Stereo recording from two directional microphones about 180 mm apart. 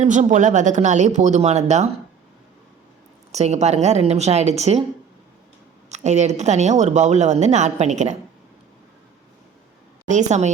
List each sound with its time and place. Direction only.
0.0 s speech: 40° right (ahead or behind)
3.3 s speech: 40° right (ahead or behind)
5.9 s speech: 40° right (ahead or behind)
10.1 s speech: 40° right (ahead or behind)